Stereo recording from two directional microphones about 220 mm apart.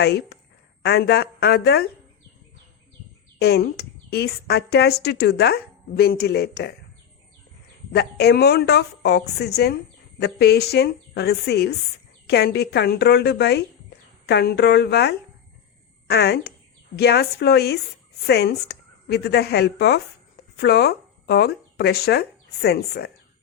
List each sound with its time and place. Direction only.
0.0 s a woman's voice: 50° left (ahead or behind)
3.3 s a woman's voice: 45° left (ahead or behind)
7.9 s a woman's voice: 50° left (ahead or behind)